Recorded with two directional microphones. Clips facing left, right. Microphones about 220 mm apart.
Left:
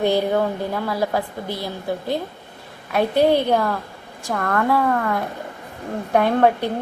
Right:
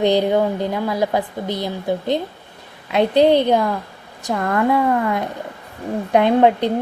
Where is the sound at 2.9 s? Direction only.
20° right (ahead or behind).